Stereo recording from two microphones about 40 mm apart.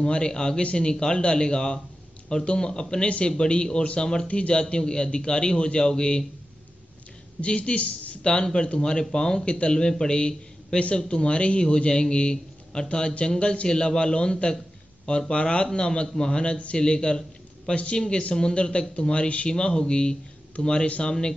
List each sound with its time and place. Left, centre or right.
0.0 s a man's voice: left
7.4 s a man's voice: left
8.3 s a man's voice: left